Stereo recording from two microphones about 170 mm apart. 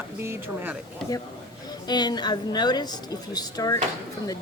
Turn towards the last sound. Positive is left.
turn(degrees=20)  # may be behind; listen again after turning